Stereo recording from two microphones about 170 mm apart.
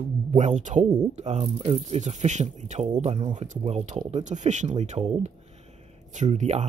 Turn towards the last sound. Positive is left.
turn(degrees=-40)  # may be behind; listen again after turning